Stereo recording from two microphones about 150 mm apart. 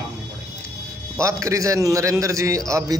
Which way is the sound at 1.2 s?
20° right (ahead or behind).